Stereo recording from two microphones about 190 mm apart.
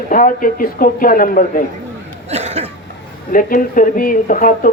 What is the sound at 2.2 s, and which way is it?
Cough, 35° right (ahead or behind).